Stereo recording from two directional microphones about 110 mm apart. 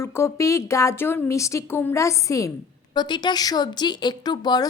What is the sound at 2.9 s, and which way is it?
A woman's voice, 45° left (ahead or behind).